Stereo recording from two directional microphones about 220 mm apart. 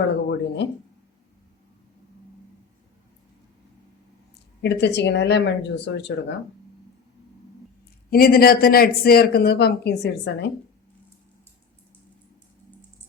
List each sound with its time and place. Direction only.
0.3 s speech: 50° left (ahead or behind)
4.6 s speech: 50° left (ahead or behind)
8.1 s speech: 45° left (ahead or behind)